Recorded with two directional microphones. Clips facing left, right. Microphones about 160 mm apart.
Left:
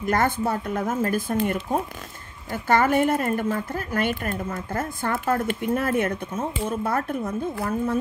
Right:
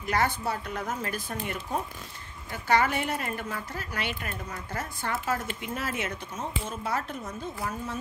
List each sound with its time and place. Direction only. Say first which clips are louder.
0.0 s speech: left 5 dB; 50° left (ahead or behind)